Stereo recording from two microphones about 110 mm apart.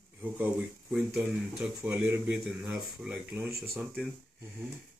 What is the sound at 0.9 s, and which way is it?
Speech, 10° right (ahead or behind).